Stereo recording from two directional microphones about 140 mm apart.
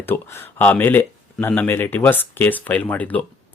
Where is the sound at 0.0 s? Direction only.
15° left (ahead or behind).